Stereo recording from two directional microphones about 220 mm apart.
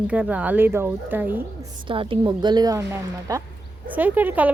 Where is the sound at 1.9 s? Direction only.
25° right (ahead or behind).